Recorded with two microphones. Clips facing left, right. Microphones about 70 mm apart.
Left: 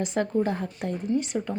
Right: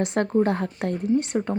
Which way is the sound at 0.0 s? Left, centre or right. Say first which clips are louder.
Right 4 dB; right.